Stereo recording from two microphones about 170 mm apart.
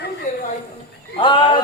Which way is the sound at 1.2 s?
30° left (ahead or behind).